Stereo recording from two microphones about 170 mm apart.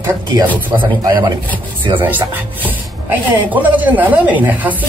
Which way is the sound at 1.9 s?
10° right (ahead or behind).